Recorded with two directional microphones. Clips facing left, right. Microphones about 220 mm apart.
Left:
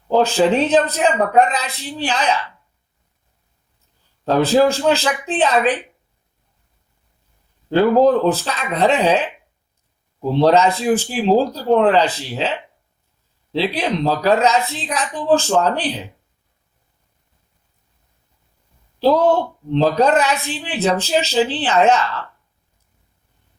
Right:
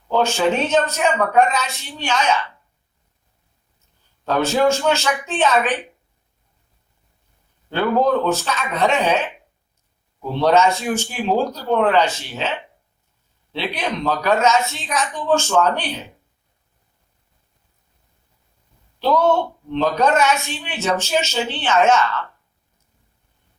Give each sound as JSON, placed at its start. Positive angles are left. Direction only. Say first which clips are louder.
{"t": 0.1, "sound": "a man's voice", "louder": "left 3 dB", "side_deg": 35}
{"t": 4.3, "sound": "a man's voice", "louder": "left 3 dB", "side_deg": 35}
{"t": 7.7, "sound": "a man's voice", "louder": "left 5 dB", "side_deg": 35}
{"t": 18.9, "sound": "a man's voice", "louder": "left 3 dB", "side_deg": 35}